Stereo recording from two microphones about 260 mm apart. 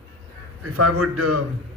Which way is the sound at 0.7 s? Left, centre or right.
Right.